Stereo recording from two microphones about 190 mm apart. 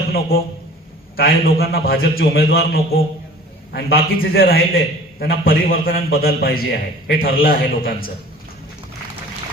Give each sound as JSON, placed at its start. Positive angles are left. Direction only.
{"t": 0.1, "sound": "a man's voice", "side_deg": 55}